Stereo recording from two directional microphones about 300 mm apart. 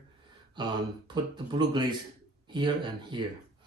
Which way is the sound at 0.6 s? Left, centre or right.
Centre.